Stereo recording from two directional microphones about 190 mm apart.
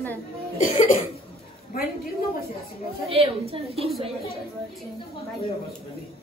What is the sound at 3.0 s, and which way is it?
Speech, 30° right (ahead or behind).